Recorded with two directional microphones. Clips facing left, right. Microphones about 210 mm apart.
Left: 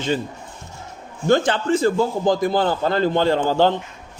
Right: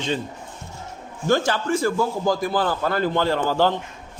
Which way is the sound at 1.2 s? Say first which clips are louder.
Left 3 dB; 20° left (ahead or behind).